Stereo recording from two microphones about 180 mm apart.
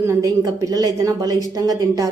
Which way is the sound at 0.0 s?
15° right (ahead or behind).